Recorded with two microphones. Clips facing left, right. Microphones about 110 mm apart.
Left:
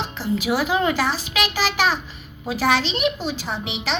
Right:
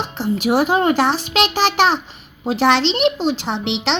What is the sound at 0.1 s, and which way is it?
A child's voice, 60° right (ahead or behind).